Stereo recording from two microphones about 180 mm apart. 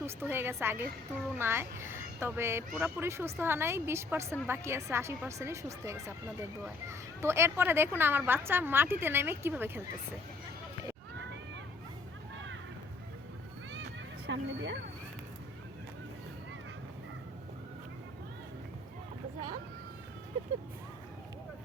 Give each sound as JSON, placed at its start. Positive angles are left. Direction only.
{"t": 0.0, "sound": "a woman's voice", "side_deg": -10}
{"t": 14.3, "sound": "speech", "side_deg": -80}